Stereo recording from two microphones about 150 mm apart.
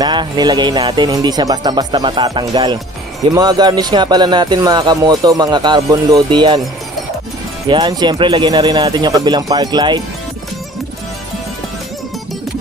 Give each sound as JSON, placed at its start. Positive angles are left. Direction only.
{"t": 0.0, "sound": "speech", "side_deg": -30}
{"t": 7.7, "sound": "speech", "side_deg": -30}